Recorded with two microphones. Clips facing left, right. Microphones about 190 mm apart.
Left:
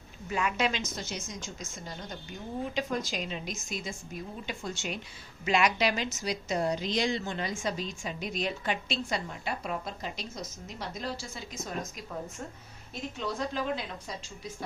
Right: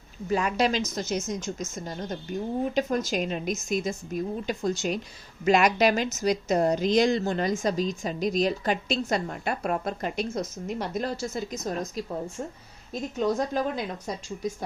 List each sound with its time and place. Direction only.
0.3 s a woman's voice: 35° right (ahead or behind)